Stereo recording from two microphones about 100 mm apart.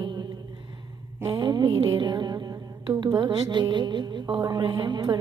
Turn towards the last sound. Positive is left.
turn(degrees=-45)  # may be behind; listen again after turning